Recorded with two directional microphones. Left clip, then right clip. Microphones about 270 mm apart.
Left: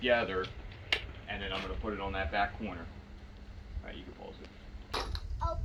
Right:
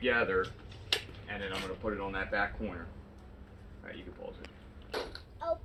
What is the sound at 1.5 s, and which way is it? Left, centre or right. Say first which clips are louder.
Speech: right 2 dB; centre.